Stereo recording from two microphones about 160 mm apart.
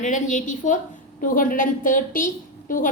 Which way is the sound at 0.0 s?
50° left (ahead or behind).